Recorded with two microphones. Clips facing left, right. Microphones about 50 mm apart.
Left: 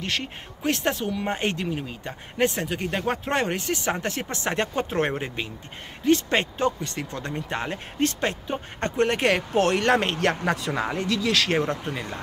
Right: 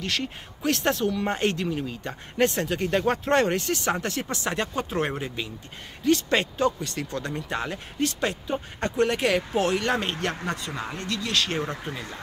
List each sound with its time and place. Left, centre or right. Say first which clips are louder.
0.0 s speech: even; left